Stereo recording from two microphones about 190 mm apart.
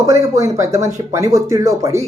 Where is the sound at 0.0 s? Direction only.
15° right (ahead or behind).